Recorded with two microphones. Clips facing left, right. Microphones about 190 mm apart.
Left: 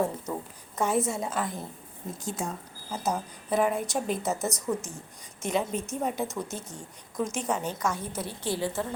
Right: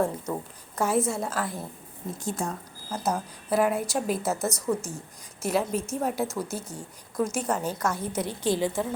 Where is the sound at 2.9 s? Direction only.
Centre (ahead or behind).